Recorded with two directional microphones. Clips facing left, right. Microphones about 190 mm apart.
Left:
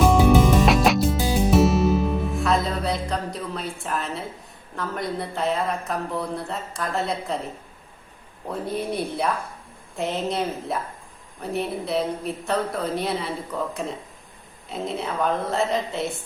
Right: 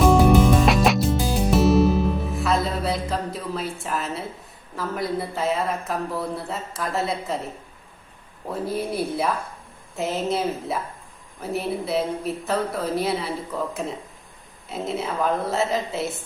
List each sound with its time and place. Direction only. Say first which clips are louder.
0.0 s music: right 1 dB; centre (ahead or behind)
4.7 s speech: right 2 dB; 5° right (ahead or behind)
8.4 s speech: right 1 dB; centre (ahead or behind)